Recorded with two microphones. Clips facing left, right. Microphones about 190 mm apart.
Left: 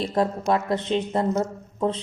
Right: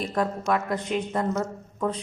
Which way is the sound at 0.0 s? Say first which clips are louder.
Left 3 dB; 30° left (ahead or behind).